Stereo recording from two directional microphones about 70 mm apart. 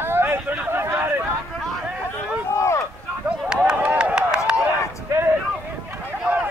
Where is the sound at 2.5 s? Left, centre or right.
Left.